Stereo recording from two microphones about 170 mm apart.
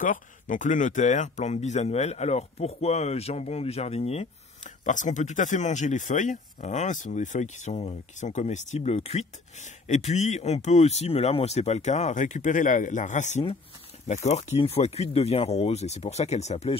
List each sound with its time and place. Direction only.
0.0 s speech: 50° left (ahead or behind)